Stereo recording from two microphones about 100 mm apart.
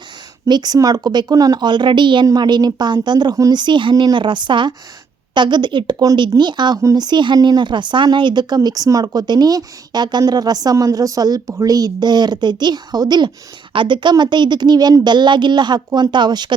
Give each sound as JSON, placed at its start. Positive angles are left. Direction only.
{"t": 0.4, "sound": "speech", "side_deg": -45}